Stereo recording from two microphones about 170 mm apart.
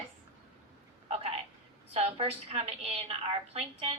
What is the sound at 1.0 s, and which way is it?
Speech, 35° right (ahead or behind).